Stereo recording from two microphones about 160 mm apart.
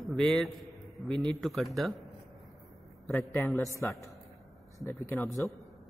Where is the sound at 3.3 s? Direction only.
15° left (ahead or behind).